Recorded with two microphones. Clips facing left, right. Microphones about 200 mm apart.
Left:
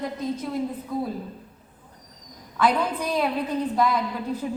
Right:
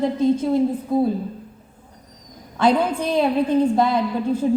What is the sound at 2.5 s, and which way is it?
A woman's voice, 30° right (ahead or behind).